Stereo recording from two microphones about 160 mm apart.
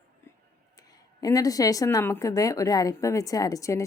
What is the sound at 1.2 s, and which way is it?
Speech, 20° left (ahead or behind).